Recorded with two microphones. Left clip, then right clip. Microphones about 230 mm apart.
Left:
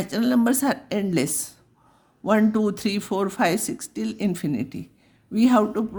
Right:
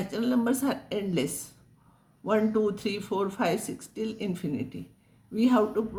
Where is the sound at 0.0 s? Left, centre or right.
Left.